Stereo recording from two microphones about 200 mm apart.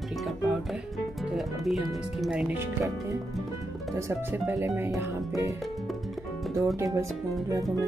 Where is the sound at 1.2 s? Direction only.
Centre (ahead or behind); by 5.5 s 15° right (ahead or behind).